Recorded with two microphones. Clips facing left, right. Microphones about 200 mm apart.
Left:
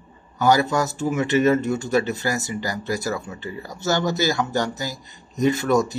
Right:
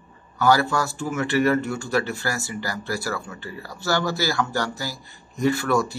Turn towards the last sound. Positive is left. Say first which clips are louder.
# left 2 dB
turn(degrees=20)  # may be behind; listen again after turning